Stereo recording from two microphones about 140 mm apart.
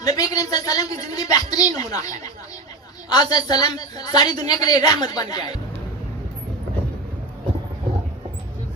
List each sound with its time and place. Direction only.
0.0 s a woman's voice: 25° left (ahead or behind)